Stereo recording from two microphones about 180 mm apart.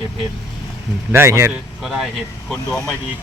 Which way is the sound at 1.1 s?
15° right (ahead or behind).